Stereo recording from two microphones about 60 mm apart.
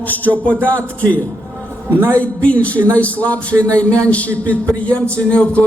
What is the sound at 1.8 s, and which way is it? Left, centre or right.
Speech, right.